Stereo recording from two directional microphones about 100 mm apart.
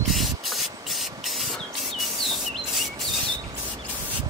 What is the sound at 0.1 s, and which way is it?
Spray, centre (ahead or behind).